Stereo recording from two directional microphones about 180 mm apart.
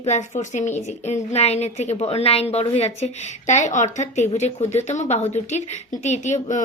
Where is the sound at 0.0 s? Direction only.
40° left (ahead or behind).